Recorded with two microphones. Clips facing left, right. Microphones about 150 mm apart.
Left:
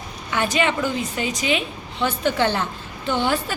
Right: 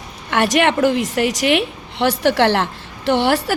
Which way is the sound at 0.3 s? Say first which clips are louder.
Right 5 dB; 70° right (ahead or behind).